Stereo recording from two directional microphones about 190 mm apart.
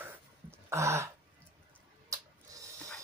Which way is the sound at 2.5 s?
15° right (ahead or behind).